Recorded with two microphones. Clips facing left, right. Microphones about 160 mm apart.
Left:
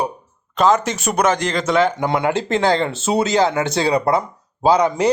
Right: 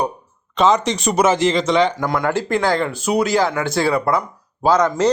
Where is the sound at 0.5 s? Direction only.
Centre (ahead or behind).